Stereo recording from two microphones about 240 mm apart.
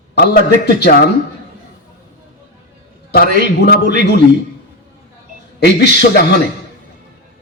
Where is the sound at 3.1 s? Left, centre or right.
Left.